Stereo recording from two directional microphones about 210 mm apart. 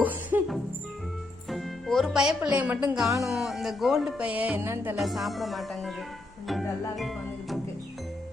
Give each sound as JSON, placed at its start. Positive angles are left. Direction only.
{"t": 0.0, "sound": "music", "side_deg": -10}
{"t": 1.5, "sound": "a woman's voice", "side_deg": 0}
{"t": 3.2, "sound": "music", "side_deg": 0}
{"t": 4.9, "sound": "music", "side_deg": 0}
{"t": 6.9, "sound": "music", "side_deg": 0}